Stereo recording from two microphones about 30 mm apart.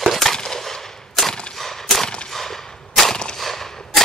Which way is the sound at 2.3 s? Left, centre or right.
Centre.